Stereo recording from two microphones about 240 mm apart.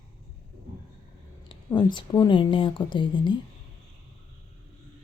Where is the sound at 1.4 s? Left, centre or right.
Centre.